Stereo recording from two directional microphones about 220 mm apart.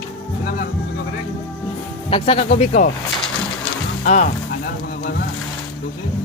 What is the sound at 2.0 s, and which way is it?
Speech, 25° left (ahead or behind).